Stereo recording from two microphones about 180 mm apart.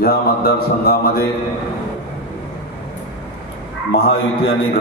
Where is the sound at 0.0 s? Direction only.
55° left (ahead or behind).